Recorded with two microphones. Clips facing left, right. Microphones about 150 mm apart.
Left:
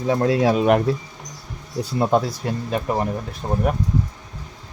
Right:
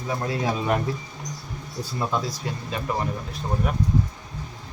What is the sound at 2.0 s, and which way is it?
Speech, 60° left (ahead or behind).